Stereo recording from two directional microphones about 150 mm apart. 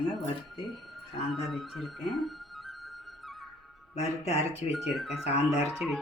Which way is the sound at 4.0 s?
45° left (ahead or behind).